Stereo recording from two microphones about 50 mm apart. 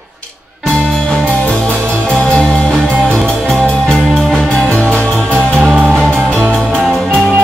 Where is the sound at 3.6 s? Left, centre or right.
Centre.